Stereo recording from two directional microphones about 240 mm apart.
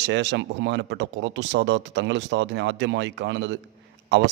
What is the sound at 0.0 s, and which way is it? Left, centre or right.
A man's voice, right.